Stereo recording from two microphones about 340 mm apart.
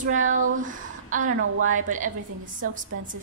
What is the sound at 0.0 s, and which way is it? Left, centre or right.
Speech, right.